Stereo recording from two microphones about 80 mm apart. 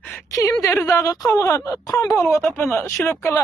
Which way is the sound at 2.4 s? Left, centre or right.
Left.